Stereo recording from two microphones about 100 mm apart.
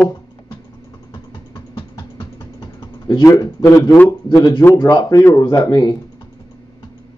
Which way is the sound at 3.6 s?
35° left (ahead or behind).